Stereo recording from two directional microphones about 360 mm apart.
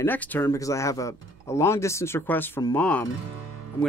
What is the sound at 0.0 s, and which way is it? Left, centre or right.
Speech, centre.